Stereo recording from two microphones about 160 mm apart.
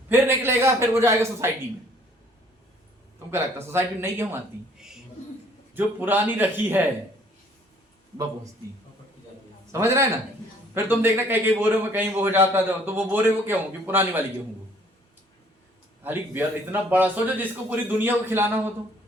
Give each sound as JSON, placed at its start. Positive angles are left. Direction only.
{"t": 0.1, "sound": "a sound", "side_deg": -15}
{"t": 3.3, "sound": "a man's voice", "side_deg": -15}
{"t": 5.7, "sound": "a man's voice", "side_deg": -10}
{"t": 9.7, "sound": "a man's voice", "side_deg": -15}
{"t": 16.0, "sound": "a man's voice", "side_deg": -10}